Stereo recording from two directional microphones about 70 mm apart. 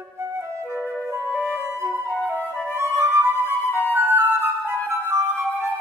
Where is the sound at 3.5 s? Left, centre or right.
Left.